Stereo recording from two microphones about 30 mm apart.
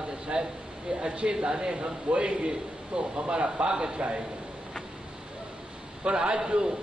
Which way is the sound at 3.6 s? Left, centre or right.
Right.